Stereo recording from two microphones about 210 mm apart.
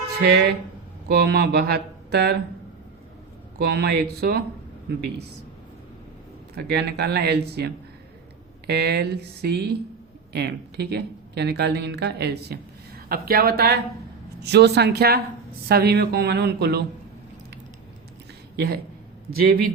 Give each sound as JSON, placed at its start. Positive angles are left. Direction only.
{"t": 0.2, "sound": "speech", "side_deg": -50}
{"t": 3.6, "sound": "speech", "side_deg": -50}
{"t": 6.7, "sound": "speech", "side_deg": -50}
{"t": 18.5, "sound": "speech", "side_deg": -50}